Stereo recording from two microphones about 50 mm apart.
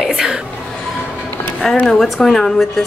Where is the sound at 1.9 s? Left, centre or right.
Centre.